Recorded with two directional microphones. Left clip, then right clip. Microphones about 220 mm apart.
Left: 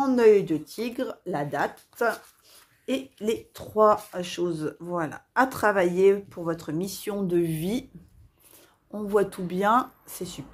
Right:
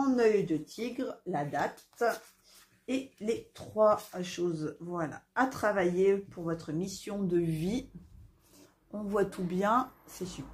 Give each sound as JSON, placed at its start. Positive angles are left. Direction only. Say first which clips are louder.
{"t": 0.0, "sound": "speech", "louder": "left 8 dB", "side_deg": 45}